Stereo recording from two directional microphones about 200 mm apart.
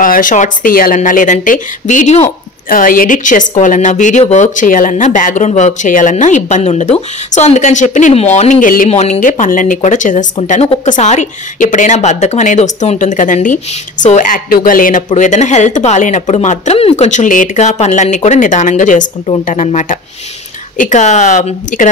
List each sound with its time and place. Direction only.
0.0 s speech: 45° left (ahead or behind)